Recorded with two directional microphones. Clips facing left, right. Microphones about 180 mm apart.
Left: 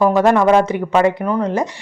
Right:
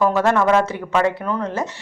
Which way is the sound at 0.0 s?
15° left (ahead or behind).